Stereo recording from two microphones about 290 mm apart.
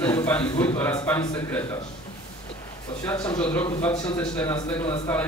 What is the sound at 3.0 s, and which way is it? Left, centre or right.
A man's voice, centre.